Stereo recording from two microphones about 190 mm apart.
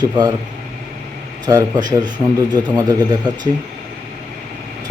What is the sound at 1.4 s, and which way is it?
Speech, 20° right (ahead or behind).